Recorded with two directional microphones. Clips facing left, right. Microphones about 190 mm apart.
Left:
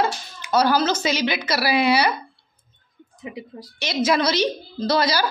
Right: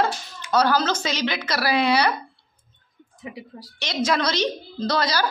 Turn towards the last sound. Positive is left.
turn(degrees=10)  # may be behind; listen again after turning